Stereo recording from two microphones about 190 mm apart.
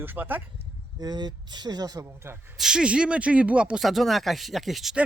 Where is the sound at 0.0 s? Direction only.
10° right (ahead or behind).